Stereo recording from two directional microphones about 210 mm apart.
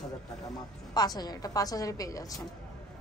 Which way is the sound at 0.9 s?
20° left (ahead or behind).